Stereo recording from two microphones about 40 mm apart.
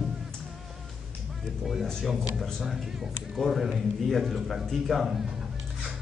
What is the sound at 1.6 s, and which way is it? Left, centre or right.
A man's voice, centre.